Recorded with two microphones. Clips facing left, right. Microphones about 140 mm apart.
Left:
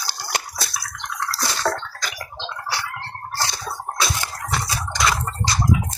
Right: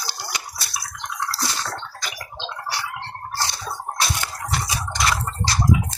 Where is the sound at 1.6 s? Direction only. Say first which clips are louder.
Left 9 dB; 90° left.